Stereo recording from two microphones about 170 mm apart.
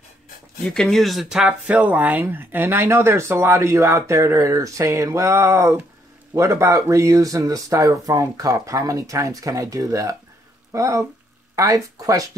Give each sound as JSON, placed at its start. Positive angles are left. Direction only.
{"t": 0.7, "sound": "speech", "side_deg": 5}